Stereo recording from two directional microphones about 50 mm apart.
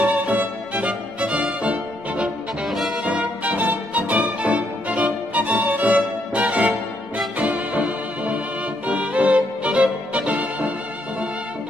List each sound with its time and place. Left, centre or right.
0.0 s music: right
2.6 s music: centre
3.0 s music: right